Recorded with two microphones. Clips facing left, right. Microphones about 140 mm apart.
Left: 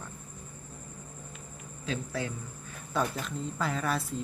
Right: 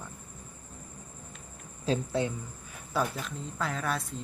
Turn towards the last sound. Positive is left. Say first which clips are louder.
# left 2 dB
turn(degrees=0)  # may be behind; listen again after turning